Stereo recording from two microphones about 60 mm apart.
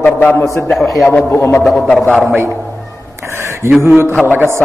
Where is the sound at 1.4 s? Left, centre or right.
Left.